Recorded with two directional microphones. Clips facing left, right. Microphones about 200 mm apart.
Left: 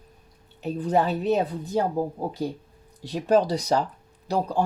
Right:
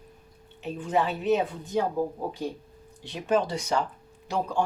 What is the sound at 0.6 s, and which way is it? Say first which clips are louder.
Speech: left 4 dB; 35° left (ahead or behind).